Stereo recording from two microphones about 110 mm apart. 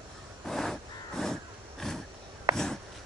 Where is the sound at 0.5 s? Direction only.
5° left (ahead or behind).